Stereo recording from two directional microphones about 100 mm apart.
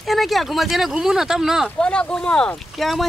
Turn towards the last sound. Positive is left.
turn(degrees=0)  # may be behind; listen again after turning